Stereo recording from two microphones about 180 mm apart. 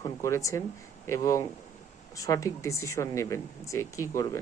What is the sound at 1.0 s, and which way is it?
Speech, 15° left (ahead or behind).